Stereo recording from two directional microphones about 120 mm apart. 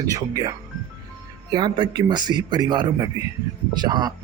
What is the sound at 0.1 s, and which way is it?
Speech, 30° right (ahead or behind).